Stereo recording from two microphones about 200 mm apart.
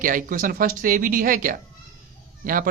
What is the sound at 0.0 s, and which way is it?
Speech, 45° right (ahead or behind).